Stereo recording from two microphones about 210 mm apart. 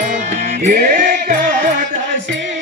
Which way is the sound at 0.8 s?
50° right (ahead or behind).